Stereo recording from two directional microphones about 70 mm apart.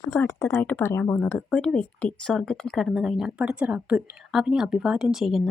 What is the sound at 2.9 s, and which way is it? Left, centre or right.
Speech, centre.